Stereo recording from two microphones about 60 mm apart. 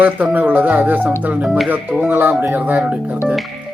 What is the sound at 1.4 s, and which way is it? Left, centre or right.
Speech, centre.